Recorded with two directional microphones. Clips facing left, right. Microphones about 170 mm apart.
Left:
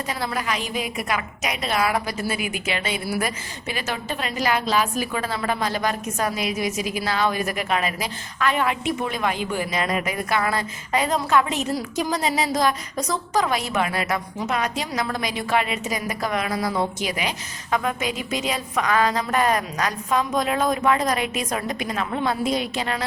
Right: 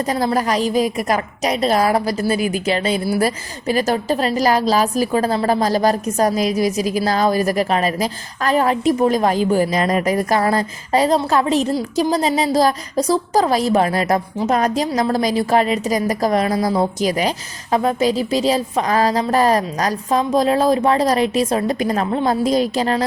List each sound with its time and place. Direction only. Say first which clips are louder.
0.0 s a woman's voice: right 9 dB; 40° right (ahead or behind)